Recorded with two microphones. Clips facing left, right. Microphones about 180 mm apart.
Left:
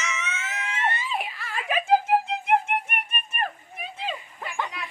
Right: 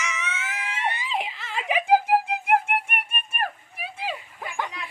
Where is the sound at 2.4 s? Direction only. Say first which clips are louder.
Right 1 dB; 10° right (ahead or behind).